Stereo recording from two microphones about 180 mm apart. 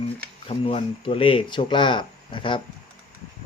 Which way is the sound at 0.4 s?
30° left (ahead or behind).